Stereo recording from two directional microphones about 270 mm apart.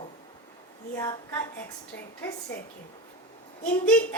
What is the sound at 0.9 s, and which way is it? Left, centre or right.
A woman's voice, centre.